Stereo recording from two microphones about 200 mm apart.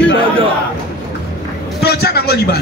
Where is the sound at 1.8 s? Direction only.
55° left (ahead or behind).